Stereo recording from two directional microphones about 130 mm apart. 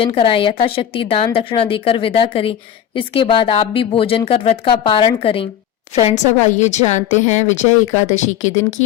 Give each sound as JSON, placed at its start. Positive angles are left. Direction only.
{"t": 0.0, "sound": "a woman's voice", "side_deg": 45}
{"t": 5.9, "sound": "a woman's voice", "side_deg": 60}